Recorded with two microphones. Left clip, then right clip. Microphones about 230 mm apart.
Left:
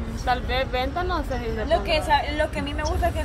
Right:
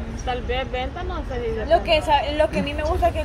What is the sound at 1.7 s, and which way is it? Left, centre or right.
A woman's voice, right.